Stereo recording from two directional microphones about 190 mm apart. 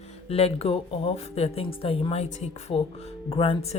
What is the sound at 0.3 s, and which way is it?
Speech, 30° left (ahead or behind).